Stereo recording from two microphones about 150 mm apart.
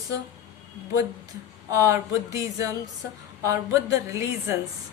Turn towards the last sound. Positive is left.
turn(degrees=-20)  # may be behind; listen again after turning